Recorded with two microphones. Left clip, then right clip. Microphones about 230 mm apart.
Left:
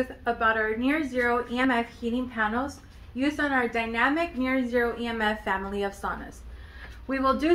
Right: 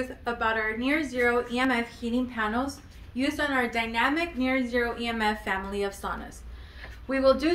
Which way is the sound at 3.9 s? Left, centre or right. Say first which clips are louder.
Left 1 dB; left.